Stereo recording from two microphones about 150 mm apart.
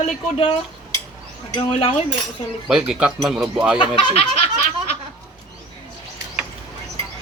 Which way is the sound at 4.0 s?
40° left (ahead or behind).